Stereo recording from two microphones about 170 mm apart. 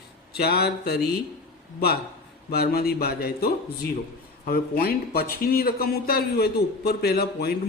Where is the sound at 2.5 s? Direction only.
65° left (ahead or behind).